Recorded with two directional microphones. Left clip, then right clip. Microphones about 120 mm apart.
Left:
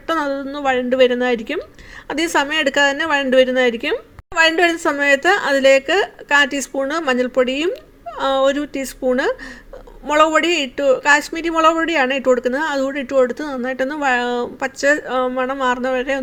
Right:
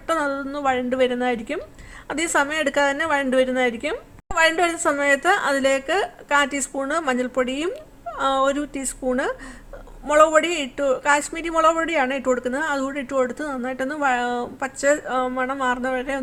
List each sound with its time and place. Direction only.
0.1 s a woman's voice: 20° left (ahead or behind)